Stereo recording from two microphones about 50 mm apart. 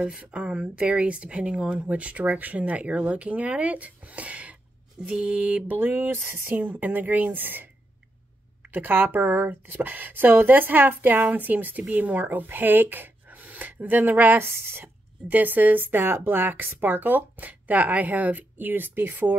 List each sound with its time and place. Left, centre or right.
0.0 s speech: right
5.8 s a woman's voice: right
6.5 s speech: right
14.4 s a woman's voice: right
15.2 s speech: right